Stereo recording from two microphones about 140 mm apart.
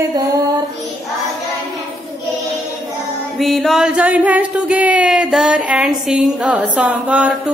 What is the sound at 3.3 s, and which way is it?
Music, centre (ahead or behind).